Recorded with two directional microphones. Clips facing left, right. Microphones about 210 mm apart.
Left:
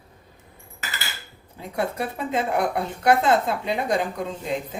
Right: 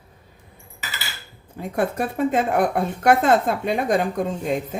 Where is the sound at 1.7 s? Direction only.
50° right (ahead or behind).